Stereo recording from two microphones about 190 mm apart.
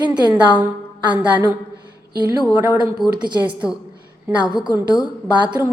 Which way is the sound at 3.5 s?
5° right (ahead or behind).